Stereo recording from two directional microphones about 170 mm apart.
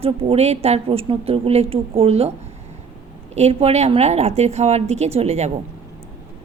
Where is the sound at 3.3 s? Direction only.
40° right (ahead or behind).